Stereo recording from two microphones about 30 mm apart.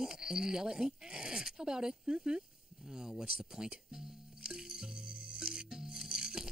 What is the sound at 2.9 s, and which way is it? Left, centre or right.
Music, right.